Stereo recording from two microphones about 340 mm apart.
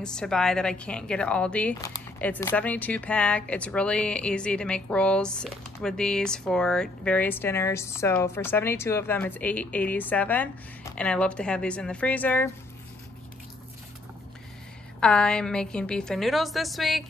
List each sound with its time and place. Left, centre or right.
0.0 s speech: centre
15.0 s speech: centre